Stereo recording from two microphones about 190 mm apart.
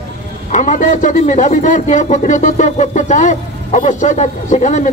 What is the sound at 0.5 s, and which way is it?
Speech, 40° left (ahead or behind).